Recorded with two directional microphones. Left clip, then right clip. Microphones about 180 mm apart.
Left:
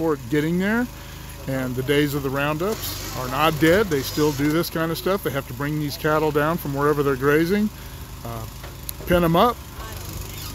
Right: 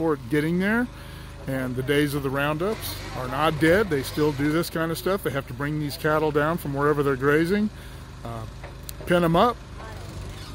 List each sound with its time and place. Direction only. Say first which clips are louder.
0.0 s speech: left 2 dB; centre (ahead or behind)
2.8 s speech: left 3 dB; 70° left (ahead or behind)
3.2 s speech: left 3 dB; 5° left (ahead or behind)
9.0 s speech: left 2 dB; centre (ahead or behind)